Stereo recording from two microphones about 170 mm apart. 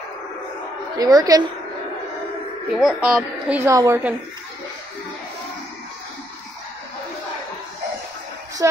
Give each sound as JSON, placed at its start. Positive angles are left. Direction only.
{"t": 0.9, "sound": "a woman's voice", "side_deg": -20}
{"t": 2.8, "sound": "a woman's voice", "side_deg": 0}